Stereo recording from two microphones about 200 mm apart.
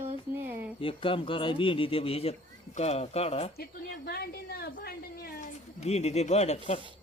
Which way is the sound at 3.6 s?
50° left (ahead or behind).